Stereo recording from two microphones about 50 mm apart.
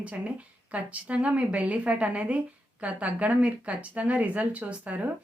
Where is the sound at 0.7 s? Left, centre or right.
Right.